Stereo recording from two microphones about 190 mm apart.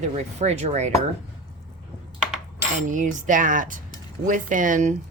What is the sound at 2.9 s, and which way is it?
Speech, 40° right (ahead or behind).